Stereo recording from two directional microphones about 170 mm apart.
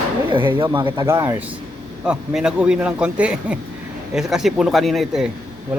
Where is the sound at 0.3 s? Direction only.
30° right (ahead or behind).